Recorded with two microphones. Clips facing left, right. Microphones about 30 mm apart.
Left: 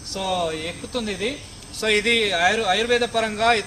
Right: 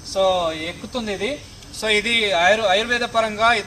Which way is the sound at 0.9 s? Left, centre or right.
Centre.